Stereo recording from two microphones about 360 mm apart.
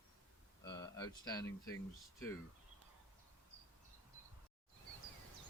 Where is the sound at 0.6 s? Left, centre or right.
Centre.